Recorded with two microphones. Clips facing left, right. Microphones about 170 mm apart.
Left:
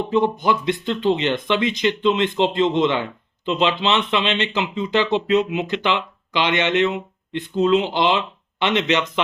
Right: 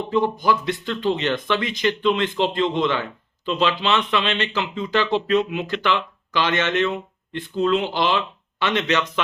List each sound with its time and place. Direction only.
0.1 s speech: 20° left (ahead or behind)